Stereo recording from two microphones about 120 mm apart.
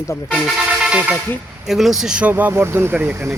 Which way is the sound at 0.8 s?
10° right (ahead or behind).